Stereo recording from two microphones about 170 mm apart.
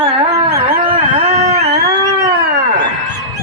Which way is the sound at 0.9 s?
45° right (ahead or behind).